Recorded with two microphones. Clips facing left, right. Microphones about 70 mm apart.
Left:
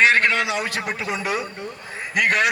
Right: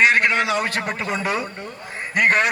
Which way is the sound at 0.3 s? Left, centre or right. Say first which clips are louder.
Right 2 dB; right.